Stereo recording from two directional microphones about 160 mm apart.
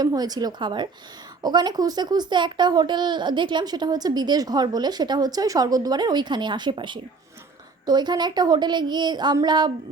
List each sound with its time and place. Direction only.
0.0 s speech: 25° right (ahead or behind)